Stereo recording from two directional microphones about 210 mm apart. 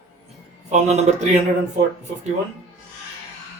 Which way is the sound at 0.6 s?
30° right (ahead or behind).